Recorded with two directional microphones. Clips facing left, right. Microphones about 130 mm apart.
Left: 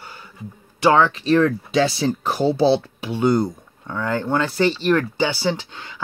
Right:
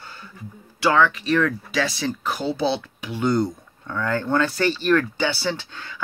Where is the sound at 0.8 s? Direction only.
30° left (ahead or behind).